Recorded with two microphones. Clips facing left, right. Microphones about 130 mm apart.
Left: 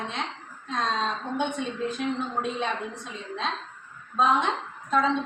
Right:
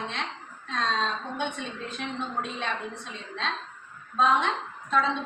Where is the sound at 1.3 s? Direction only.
15° left (ahead or behind).